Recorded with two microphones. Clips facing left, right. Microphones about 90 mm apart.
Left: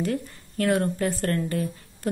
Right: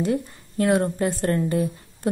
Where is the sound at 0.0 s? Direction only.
20° right (ahead or behind).